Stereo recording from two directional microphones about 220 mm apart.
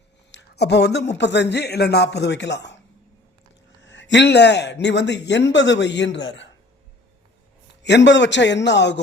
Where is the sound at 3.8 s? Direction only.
55° left (ahead or behind).